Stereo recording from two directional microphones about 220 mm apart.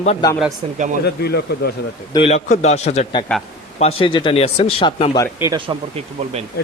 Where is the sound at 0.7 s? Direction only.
35° right (ahead or behind).